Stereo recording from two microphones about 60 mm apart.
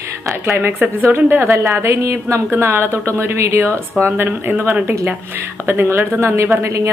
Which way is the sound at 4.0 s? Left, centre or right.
Right.